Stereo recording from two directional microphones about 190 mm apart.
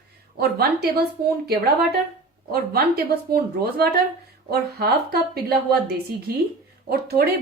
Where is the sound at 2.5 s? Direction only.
55° right (ahead or behind).